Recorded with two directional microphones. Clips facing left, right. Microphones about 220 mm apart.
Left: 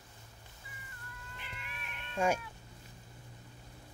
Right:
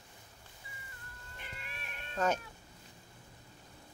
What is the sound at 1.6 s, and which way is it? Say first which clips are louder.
Cat: even; 40° right (ahead or behind).